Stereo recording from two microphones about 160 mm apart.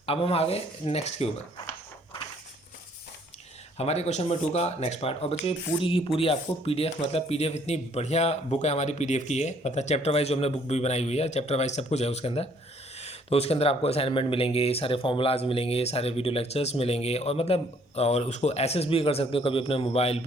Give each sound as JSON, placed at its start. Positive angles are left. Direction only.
{"t": 0.0, "sound": "speech", "side_deg": 35}
{"t": 3.8, "sound": "speech", "side_deg": 40}